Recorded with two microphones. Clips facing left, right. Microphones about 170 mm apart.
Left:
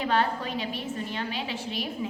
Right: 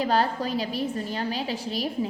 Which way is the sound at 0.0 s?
35° right (ahead or behind).